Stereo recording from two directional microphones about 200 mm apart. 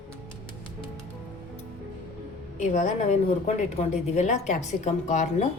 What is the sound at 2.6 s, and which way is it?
A woman's voice, 40° left (ahead or behind).